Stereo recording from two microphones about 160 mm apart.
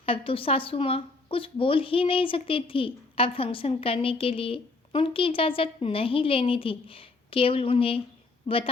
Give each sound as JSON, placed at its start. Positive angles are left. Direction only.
{"t": 0.0, "sound": "speech", "side_deg": 35}